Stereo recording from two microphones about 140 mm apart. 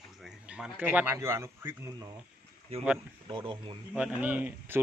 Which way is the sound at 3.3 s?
35° right (ahead or behind).